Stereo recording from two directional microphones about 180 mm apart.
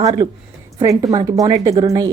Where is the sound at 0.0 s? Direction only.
20° right (ahead or behind).